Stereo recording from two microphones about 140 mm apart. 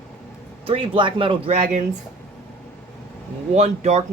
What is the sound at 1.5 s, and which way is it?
Speech, 60° right (ahead or behind).